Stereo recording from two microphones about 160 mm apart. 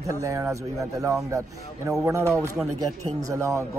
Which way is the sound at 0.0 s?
20° right (ahead or behind).